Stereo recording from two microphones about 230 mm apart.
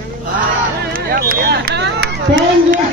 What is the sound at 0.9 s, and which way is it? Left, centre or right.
Speech, right.